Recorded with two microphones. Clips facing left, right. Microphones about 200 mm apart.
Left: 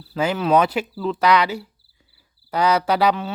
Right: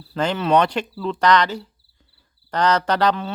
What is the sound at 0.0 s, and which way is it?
Speech, 5° left (ahead or behind).